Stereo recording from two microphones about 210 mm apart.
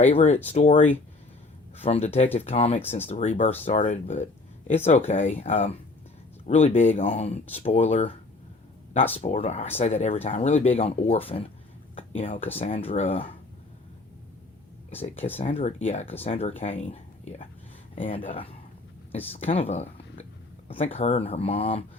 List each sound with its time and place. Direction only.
0.0 s speech: 35° left (ahead or behind)
14.8 s speech: 30° left (ahead or behind)